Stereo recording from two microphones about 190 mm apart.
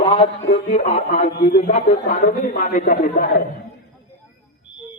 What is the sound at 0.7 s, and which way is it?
Speech, 35° left (ahead or behind).